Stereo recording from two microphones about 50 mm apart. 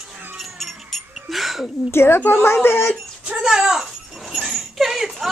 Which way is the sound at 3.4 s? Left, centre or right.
Centre.